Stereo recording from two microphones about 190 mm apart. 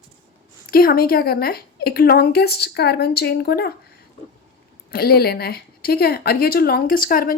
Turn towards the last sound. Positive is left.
turn(degrees=50)  # may be behind; listen again after turning